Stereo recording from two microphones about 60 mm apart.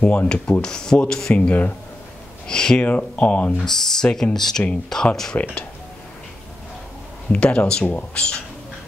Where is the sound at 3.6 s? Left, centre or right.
Centre.